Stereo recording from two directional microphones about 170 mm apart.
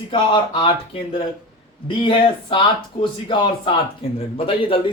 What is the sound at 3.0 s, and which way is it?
Speech, 30° left (ahead or behind).